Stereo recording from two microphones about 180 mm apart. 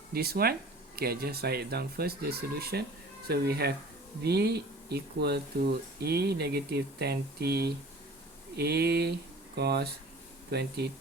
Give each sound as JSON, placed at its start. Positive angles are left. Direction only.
{"t": 0.1, "sound": "speech", "side_deg": -60}